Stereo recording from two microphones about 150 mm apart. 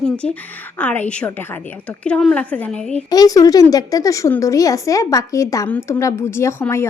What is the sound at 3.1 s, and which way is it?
Speech, 25° left (ahead or behind).